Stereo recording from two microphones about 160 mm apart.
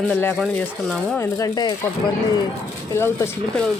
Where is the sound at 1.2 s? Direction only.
20° left (ahead or behind).